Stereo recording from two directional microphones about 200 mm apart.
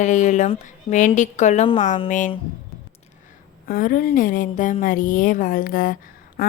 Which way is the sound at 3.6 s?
45° left (ahead or behind).